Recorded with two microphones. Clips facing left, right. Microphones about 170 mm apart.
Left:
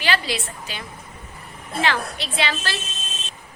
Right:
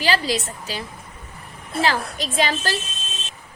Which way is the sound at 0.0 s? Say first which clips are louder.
Right 3 dB; 40° right (ahead or behind).